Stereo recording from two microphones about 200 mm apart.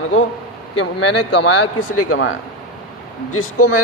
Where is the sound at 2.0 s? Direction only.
90° left.